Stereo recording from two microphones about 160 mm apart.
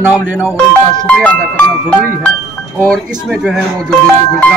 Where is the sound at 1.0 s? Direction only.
5° left (ahead or behind).